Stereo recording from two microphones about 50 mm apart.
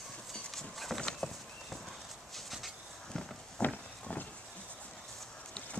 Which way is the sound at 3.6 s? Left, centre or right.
Centre.